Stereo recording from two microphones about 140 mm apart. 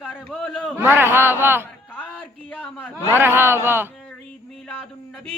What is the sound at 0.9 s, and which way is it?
Speech, 15° right (ahead or behind).